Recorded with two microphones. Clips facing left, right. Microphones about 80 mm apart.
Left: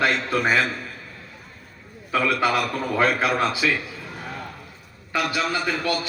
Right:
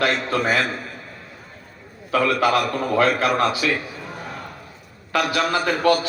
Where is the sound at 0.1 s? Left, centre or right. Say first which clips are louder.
Right 1 dB; right.